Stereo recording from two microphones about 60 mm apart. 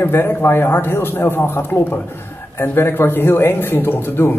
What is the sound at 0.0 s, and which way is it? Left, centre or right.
Speech, left.